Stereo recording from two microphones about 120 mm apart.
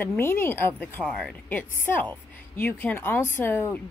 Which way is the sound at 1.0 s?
Centre (ahead or behind).